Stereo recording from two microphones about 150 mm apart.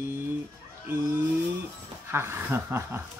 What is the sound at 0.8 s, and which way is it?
Music, 15° right (ahead or behind).